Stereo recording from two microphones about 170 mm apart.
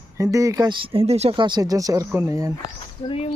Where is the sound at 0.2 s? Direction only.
20° right (ahead or behind).